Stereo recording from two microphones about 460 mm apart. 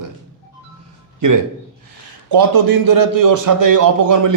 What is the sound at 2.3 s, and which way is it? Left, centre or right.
A man's voice, right.